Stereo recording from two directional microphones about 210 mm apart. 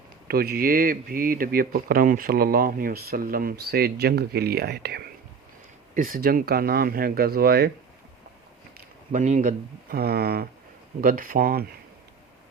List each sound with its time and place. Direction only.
0.3 s speech: 45° right (ahead or behind)
9.1 s speech: 35° right (ahead or behind)